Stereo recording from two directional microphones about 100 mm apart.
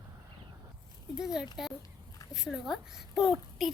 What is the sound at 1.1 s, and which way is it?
Speech, 5° right (ahead or behind).